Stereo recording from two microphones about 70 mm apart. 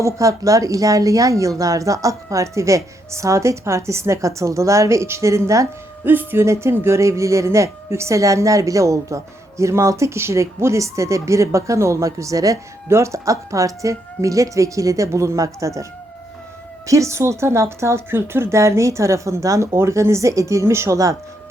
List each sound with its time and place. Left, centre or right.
0.0 s a woman's voice: right
6.1 s speech: right
6.4 s a woman's voice: right